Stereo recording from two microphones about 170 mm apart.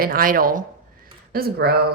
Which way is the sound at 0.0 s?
55° right (ahead or behind).